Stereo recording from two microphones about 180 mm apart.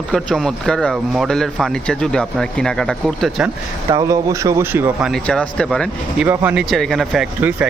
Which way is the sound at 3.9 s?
15° right (ahead or behind).